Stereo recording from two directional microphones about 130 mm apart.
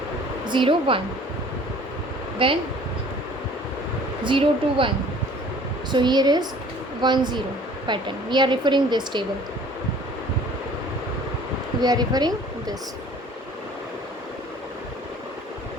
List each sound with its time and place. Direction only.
0.4 s a woman's voice: 40° right (ahead or behind)
2.4 s speech: 45° right (ahead or behind)
4.2 s a woman's voice: 40° right (ahead or behind)
5.9 s a woman's voice: 35° right (ahead or behind)
11.8 s speech: 30° right (ahead or behind)